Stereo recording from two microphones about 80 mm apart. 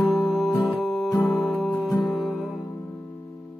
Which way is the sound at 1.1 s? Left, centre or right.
Left.